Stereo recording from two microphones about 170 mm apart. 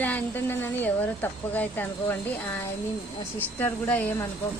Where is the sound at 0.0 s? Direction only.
10° left (ahead or behind).